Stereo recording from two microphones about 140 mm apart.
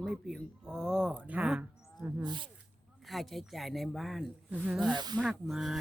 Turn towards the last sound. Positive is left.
turn(degrees=0)  # may be behind; listen again after turning